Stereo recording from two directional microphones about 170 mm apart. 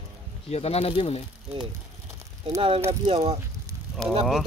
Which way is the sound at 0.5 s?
40° left (ahead or behind).